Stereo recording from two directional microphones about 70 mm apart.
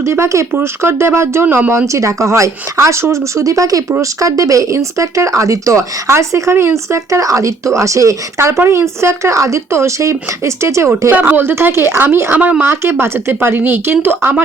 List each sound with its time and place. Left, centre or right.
0.0 s speech: right
1.9 s speech: right
11.1 s speech: right
12.4 s speech: centre
12.6 s speech: right